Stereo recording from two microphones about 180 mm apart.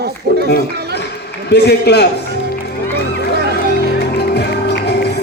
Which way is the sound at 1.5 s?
65° left (ahead or behind).